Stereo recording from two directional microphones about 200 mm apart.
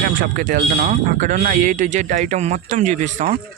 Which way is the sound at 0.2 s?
45° right (ahead or behind).